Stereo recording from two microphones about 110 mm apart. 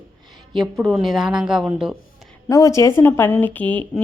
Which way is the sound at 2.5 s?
30° left (ahead or behind).